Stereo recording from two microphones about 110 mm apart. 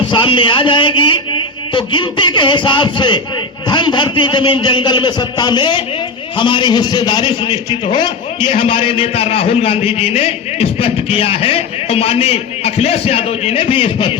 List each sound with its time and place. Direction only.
0.1 s a man's voice: 50° left (ahead or behind)